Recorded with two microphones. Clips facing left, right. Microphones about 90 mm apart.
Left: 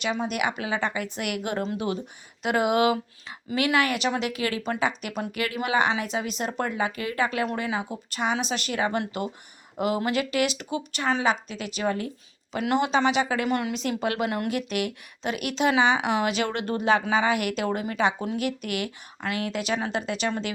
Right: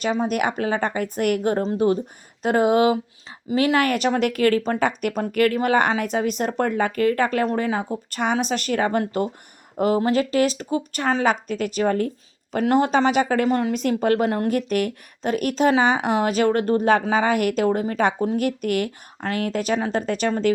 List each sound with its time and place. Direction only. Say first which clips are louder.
0.0 s a woman's voice: right 5 dB; 40° right (ahead or behind)